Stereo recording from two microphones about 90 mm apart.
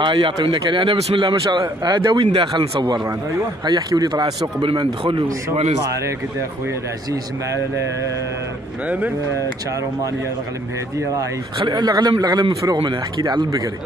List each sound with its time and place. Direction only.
0.0 s a man's voice: 70° right (ahead or behind)
1.6 s a man's voice: 45° right (ahead or behind); by 2.8 s 75° right (ahead or behind)
3.6 s a man's voice: 45° right (ahead or behind)
11.5 s a man's voice: 55° right (ahead or behind)